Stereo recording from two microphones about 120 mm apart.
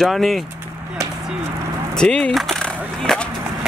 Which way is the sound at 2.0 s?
5° left (ahead or behind).